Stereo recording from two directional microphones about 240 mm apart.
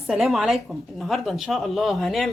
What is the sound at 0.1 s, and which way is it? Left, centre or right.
A woman's voice, centre.